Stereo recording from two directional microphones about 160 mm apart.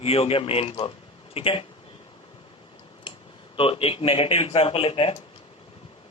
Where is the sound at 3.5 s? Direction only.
35° left (ahead or behind).